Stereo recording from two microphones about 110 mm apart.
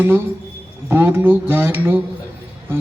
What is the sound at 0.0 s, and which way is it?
A man's voice, 20° right (ahead or behind).